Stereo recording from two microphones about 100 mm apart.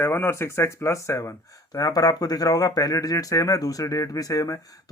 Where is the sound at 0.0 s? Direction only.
25° left (ahead or behind).